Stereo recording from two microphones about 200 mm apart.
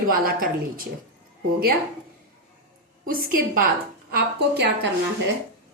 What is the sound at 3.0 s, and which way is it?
Speech, 45° right (ahead or behind).